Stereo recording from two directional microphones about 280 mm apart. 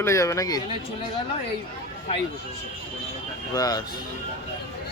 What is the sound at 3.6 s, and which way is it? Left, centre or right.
Speech, centre.